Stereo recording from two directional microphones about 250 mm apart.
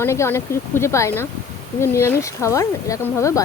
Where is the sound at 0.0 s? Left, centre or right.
Centre.